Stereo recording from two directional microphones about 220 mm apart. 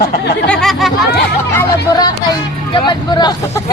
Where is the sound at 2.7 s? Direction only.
20° left (ahead or behind).